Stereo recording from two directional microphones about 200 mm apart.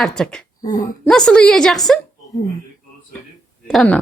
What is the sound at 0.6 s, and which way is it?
Speech, 20° left (ahead or behind).